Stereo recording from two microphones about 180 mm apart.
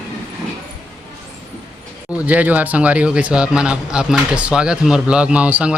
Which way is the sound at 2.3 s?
10° right (ahead or behind).